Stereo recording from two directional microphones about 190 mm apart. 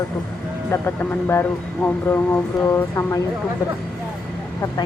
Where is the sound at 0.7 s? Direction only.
10° left (ahead or behind).